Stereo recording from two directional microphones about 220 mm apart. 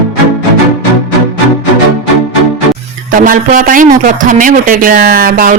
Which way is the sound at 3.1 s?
35° right (ahead or behind).